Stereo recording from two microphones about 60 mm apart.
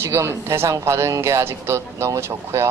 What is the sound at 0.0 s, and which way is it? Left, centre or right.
Speech, right.